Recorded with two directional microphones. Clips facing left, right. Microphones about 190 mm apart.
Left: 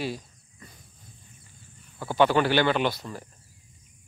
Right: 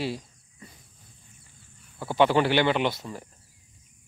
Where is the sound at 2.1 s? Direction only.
25° right (ahead or behind).